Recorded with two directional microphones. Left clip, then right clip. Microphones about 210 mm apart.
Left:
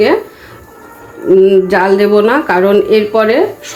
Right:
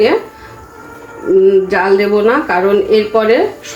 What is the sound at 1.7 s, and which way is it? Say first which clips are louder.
Speech: left 2 dB; 40° left (ahead or behind).